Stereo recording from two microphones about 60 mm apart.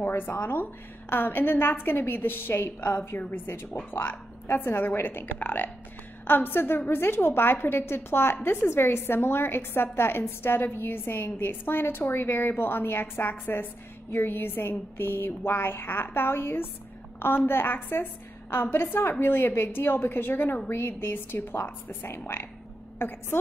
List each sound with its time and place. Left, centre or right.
0.0 s a woman's voice: left
22.0 s a woman's voice: left